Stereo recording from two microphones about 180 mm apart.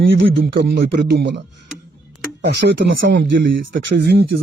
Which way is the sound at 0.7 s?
70° right (ahead or behind).